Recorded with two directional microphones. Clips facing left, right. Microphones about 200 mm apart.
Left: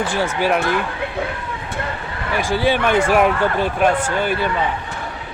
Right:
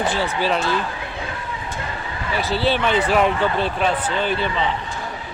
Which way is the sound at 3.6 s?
10° left (ahead or behind).